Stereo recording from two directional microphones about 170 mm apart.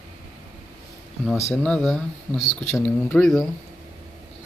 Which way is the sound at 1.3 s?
15° left (ahead or behind).